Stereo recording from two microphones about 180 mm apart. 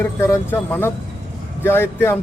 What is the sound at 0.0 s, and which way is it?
A man's voice, 15° left (ahead or behind).